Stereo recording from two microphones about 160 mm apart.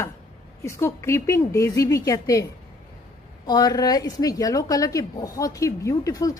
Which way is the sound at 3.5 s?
25° left (ahead or behind).